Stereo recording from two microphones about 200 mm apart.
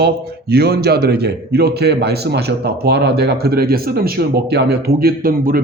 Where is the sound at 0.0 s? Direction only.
55° right (ahead or behind).